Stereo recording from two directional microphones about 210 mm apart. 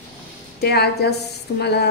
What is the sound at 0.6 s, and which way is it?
A woman's voice, 50° left (ahead or behind).